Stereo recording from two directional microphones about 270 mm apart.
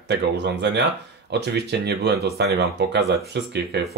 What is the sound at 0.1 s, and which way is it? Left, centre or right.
Speech, right.